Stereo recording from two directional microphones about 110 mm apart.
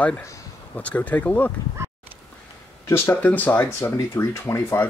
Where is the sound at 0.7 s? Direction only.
15° left (ahead or behind).